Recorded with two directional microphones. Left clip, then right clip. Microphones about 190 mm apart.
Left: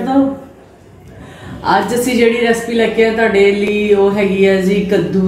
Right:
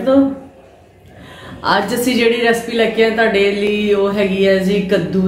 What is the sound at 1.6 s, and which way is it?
A woman's voice, 20° right (ahead or behind).